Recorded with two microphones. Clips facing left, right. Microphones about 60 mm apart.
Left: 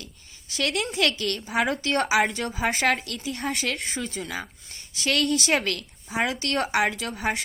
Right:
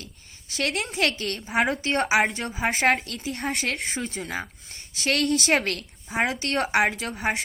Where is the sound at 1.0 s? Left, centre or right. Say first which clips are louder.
Left 1 dB; right.